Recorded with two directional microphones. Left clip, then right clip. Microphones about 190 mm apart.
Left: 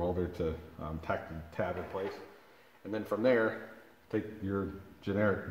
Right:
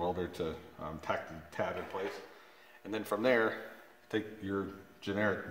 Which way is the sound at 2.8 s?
30° right (ahead or behind).